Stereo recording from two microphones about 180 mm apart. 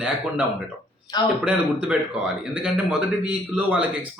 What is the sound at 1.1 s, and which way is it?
Speech, 25° left (ahead or behind).